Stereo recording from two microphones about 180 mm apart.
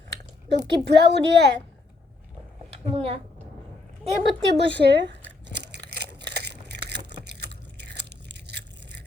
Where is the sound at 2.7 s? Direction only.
30° right (ahead or behind).